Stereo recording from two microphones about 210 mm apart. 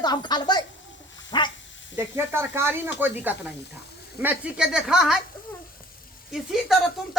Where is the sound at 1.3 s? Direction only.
20° left (ahead or behind).